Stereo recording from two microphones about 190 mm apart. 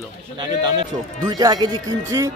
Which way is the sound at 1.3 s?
20° right (ahead or behind).